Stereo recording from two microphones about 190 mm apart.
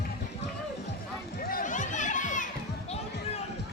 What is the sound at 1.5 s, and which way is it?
Music, 40° left (ahead or behind).